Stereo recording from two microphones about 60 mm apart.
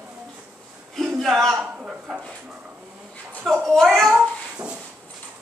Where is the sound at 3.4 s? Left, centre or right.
Centre.